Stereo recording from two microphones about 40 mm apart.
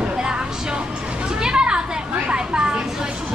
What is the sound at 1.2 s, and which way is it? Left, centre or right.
Children playing, centre.